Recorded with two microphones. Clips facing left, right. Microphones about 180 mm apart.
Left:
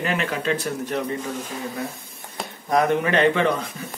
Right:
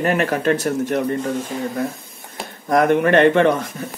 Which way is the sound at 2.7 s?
60° right (ahead or behind).